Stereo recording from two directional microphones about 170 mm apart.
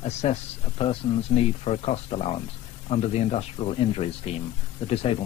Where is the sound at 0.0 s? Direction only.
40° left (ahead or behind).